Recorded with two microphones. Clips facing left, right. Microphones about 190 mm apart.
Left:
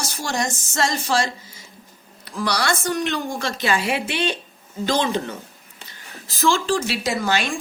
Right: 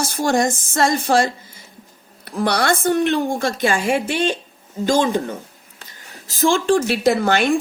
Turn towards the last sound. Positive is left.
turn(degrees=-55)  # may be behind; listen again after turning